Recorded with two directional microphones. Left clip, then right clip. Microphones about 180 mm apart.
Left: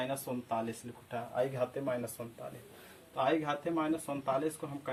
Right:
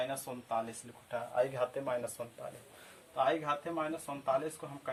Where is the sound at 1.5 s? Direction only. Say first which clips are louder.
Even; 25° right (ahead or behind).